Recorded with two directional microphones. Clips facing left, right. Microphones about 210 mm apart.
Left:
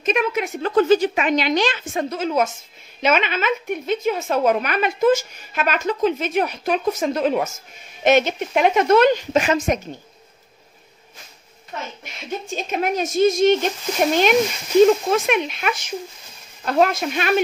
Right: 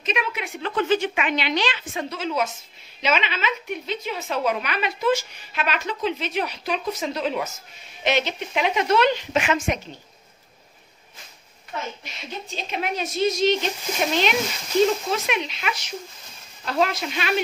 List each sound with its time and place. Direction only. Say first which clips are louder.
0.0 s a woman's voice: left 7 dB; 45° left (ahead or behind)
12.5 s a woman's voice: left 5 dB; 45° left (ahead or behind)
15.0 s a woman's voice: left 6 dB; 50° left (ahead or behind)